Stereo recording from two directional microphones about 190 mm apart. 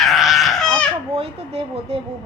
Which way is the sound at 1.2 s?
30° right (ahead or behind).